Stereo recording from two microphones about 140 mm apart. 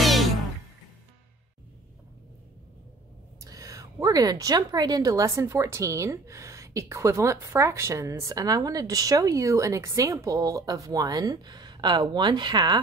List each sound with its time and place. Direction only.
0.0 s music: centre (ahead or behind)
3.3 s a woman's voice: 25° right (ahead or behind)